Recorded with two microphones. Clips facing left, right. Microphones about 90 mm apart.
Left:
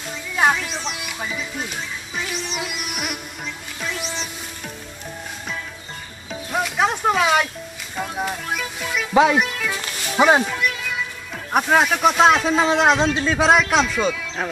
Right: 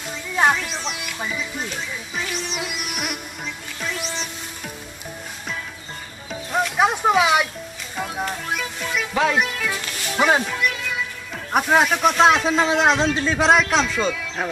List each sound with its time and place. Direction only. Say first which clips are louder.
0.1 s music: even; centre (ahead or behind)
6.5 s music: right 1 dB; centre (ahead or behind)
6.8 s a sound: right 1 dB; 10° right (ahead or behind)
7.9 s music: left 1 dB; centre (ahead or behind)
11.5 s speech: even; centre (ahead or behind)